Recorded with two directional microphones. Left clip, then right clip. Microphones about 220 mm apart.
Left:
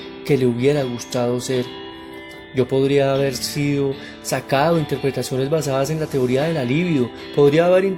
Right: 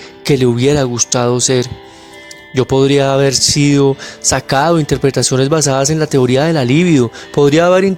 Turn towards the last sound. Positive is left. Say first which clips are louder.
# right 5 dB
turn(degrees=-45)  # may be behind; listen again after turning